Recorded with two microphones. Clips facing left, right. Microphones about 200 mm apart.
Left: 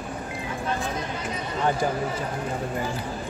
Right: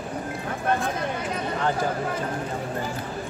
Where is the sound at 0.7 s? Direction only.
55° right (ahead or behind).